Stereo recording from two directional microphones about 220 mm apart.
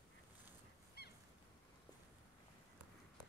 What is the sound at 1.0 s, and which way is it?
Goose, 45° left (ahead or behind).